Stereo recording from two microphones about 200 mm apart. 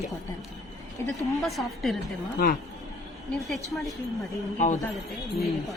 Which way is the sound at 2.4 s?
50° left (ahead or behind).